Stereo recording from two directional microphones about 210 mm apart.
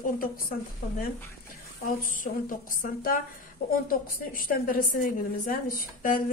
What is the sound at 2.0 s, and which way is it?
A woman's voice, 40° left (ahead or behind).